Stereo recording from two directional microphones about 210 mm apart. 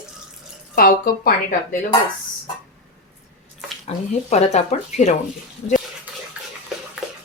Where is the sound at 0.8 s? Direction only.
45° left (ahead or behind).